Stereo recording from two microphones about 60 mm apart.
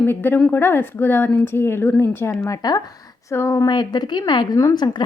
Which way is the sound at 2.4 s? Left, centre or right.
Left.